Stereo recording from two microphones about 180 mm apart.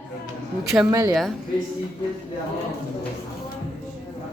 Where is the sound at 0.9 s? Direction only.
15° right (ahead or behind).